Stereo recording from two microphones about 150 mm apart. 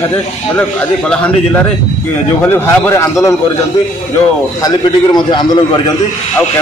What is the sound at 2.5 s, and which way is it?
Speech, 20° left (ahead or behind).